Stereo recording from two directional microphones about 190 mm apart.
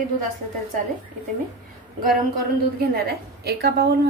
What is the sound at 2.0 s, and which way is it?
A woman's voice, 50° right (ahead or behind).